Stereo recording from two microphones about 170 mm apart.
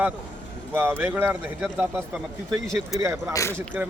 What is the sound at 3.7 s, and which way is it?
Speech, 5° right (ahead or behind).